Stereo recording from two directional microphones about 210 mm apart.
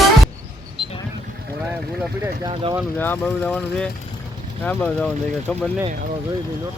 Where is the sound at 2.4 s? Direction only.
20° right (ahead or behind).